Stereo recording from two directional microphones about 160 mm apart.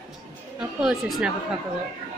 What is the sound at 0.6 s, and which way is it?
Speech, 5° right (ahead or behind).